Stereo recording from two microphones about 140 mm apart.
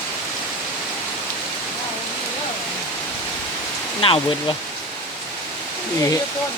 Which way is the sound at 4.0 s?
40° left (ahead or behind).